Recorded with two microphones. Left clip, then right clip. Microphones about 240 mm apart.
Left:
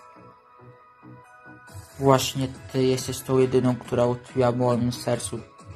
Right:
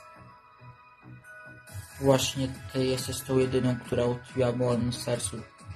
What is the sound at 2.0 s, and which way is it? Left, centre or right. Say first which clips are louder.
Speech: left 4 dB; centre.